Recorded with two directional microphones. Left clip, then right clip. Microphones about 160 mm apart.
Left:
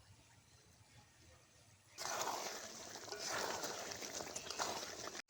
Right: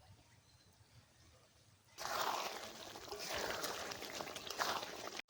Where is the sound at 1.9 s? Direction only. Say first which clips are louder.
Right 3 dB; 10° right (ahead or behind).